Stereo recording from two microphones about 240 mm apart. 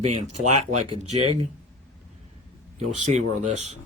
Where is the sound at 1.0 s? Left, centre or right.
Right.